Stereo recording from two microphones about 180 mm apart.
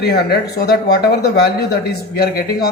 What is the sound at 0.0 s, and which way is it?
Speech, 65° left (ahead or behind).